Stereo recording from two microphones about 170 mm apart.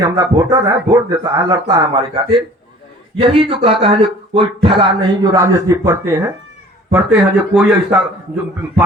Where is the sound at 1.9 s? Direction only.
30° right (ahead or behind).